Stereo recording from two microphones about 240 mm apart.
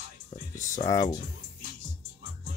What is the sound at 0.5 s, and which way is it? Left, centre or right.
Speech, centre.